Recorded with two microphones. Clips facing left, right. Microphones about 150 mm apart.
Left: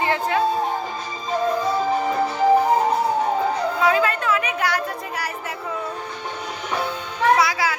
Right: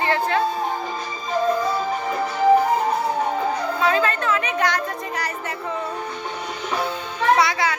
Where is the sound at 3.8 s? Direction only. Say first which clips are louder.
Left 1 dB; 10° left (ahead or behind).